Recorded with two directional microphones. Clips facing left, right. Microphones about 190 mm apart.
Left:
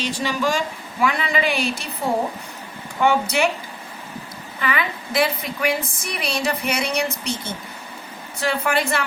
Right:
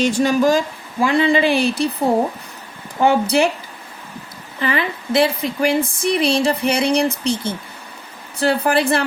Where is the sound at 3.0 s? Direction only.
35° right (ahead or behind).